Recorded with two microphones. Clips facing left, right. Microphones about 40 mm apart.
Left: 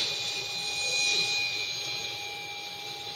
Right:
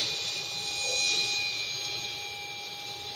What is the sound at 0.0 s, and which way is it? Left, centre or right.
Jet engine, centre.